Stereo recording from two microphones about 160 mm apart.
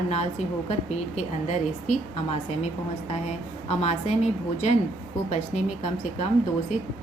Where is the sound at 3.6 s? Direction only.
45° left (ahead or behind).